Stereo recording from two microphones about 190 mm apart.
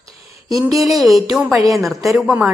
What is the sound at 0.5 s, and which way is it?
Speech, 15° right (ahead or behind).